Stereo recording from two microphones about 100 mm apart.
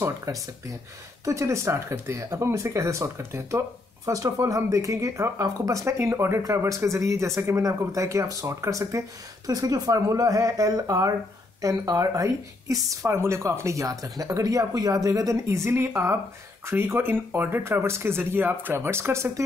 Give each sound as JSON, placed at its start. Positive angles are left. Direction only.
{"t": 0.0, "sound": "speech", "side_deg": -30}